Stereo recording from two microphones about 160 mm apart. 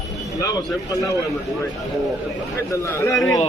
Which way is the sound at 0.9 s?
20° left (ahead or behind).